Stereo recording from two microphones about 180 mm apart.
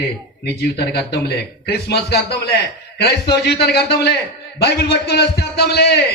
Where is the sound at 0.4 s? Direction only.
65° left (ahead or behind).